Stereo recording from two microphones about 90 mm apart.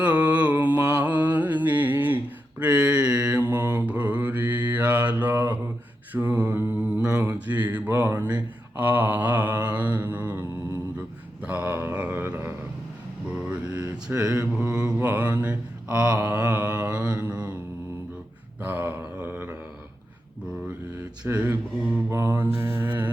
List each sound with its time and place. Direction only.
0.0 s music: 15° right (ahead or behind)
6.1 s mantra: 20° right (ahead or behind)
11.4 s mantra: 15° right (ahead or behind)
13.3 s a sound: 10° right (ahead or behind)
14.2 s mantra: 10° right (ahead or behind)
18.6 s mantra: 20° right (ahead or behind)
21.2 s mantra: 20° right (ahead or behind)